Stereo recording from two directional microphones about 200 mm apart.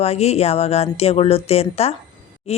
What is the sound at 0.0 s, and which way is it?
A woman's voice, 30° left (ahead or behind).